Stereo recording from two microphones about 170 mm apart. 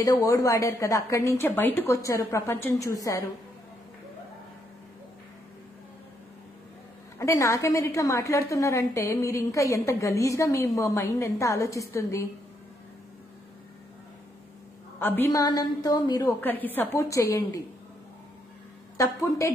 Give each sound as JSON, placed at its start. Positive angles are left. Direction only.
{"t": 0.0, "sound": "a woman's voice", "side_deg": 20}
{"t": 7.2, "sound": "a woman's voice", "side_deg": 20}
{"t": 15.0, "sound": "a woman's voice", "side_deg": 10}
{"t": 18.9, "sound": "a woman's voice", "side_deg": 20}